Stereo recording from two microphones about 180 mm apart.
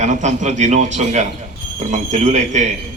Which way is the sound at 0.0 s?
45° right (ahead or behind).